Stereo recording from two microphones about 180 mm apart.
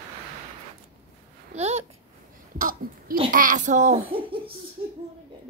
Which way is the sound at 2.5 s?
50° right (ahead or behind).